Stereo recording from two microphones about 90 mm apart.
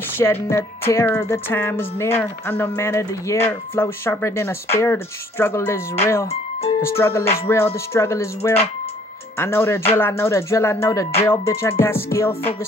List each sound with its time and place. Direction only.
0.2 s music: 30° left (ahead or behind)
9.4 s music: 25° left (ahead or behind)